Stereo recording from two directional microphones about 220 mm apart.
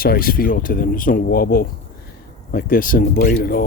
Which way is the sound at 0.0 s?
40° left (ahead or behind).